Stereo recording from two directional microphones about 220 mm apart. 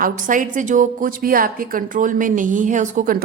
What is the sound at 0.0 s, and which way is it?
A woman's voice, 35° right (ahead or behind).